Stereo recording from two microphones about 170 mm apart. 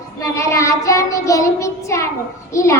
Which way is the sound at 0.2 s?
20° left (ahead or behind).